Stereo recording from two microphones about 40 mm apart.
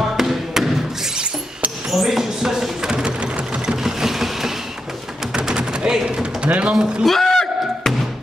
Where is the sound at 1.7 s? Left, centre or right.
Centre.